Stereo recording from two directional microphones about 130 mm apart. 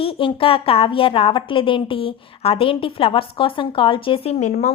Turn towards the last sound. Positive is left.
turn(degrees=60)  # may be behind; listen again after turning